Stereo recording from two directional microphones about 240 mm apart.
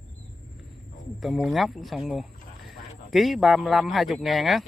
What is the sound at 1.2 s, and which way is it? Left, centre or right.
Speech, centre.